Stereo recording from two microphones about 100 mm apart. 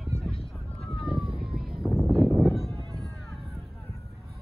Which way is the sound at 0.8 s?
5° right (ahead or behind).